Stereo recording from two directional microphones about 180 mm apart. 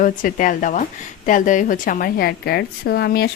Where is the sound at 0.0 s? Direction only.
50° left (ahead or behind).